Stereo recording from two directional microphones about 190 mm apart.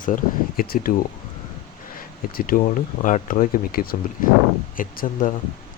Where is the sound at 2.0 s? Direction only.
50° left (ahead or behind).